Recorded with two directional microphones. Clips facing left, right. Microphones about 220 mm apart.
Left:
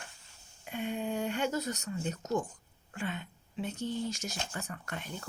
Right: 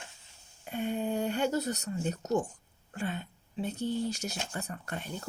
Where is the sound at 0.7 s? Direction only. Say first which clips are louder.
Right 3 dB; 40° right (ahead or behind).